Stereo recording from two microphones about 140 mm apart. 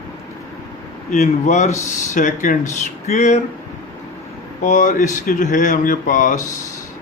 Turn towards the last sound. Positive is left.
turn(degrees=70)  # may be behind; listen again after turning